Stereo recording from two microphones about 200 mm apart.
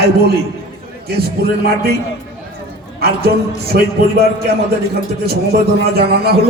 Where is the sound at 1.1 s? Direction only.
50° right (ahead or behind).